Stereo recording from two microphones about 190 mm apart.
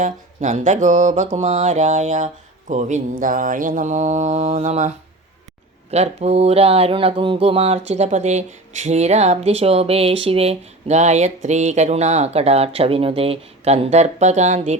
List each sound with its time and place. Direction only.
0.0 s speech: 40° right (ahead or behind)